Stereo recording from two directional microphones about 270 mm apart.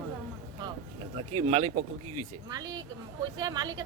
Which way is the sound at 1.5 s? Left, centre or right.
Right.